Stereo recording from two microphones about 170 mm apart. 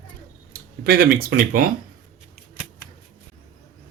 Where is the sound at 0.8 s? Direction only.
60° right (ahead or behind).